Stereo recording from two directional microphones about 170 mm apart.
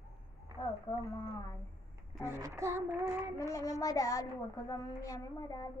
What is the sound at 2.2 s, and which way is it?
Speech, 15° right (ahead or behind).